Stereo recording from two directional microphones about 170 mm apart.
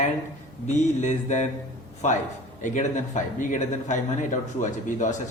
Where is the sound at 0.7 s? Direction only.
45° left (ahead or behind).